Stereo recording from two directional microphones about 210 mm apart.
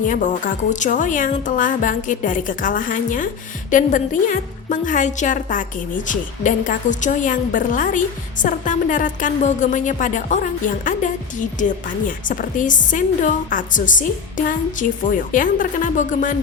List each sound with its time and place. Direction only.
0.1 s a woman's voice: 35° left (ahead or behind)